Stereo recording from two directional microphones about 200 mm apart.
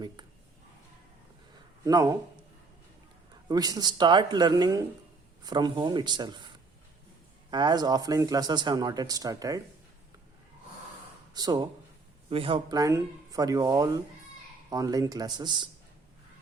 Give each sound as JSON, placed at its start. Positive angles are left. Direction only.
{"t": 1.8, "sound": "speech", "side_deg": -20}
{"t": 3.5, "sound": "speech", "side_deg": -20}
{"t": 7.5, "sound": "speech", "side_deg": -20}
{"t": 11.3, "sound": "speech", "side_deg": -20}